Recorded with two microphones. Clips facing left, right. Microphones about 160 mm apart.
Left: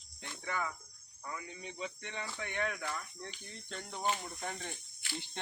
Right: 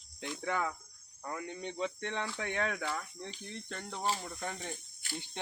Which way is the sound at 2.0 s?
90° right.